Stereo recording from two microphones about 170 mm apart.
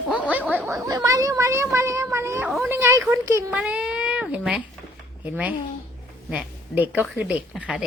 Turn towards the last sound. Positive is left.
turn(degrees=-10)  # may be behind; listen again after turning